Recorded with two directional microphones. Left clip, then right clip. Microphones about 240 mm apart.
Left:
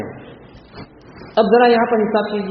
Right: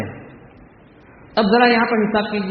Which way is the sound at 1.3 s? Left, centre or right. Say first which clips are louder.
Left 2 dB; right.